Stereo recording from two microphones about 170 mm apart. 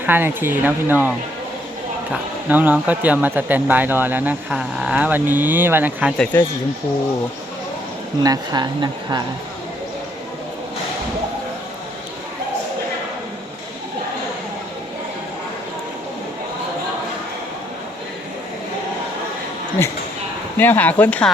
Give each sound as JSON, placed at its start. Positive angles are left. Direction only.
{"t": 0.0, "sound": "speech", "side_deg": -10}
{"t": 2.5, "sound": "speech", "side_deg": -10}
{"t": 8.2, "sound": "a woman's voice", "side_deg": -20}
{"t": 19.8, "sound": "speech", "side_deg": 15}